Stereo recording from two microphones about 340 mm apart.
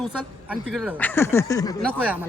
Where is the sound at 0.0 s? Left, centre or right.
Centre.